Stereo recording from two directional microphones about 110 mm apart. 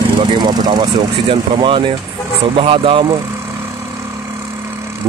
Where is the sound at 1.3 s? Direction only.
55° right (ahead or behind).